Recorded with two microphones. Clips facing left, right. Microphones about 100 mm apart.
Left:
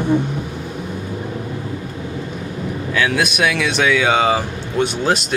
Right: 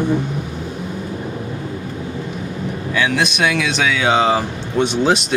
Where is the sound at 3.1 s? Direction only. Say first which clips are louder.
Even; 5° left (ahead or behind).